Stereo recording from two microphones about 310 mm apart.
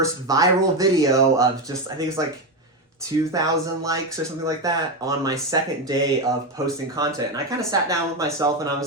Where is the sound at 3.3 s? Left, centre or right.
Centre.